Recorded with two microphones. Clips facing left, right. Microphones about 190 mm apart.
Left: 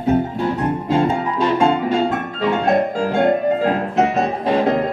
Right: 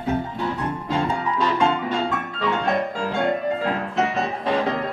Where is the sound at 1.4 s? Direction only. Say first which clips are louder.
Left 5 dB; 45° left (ahead or behind).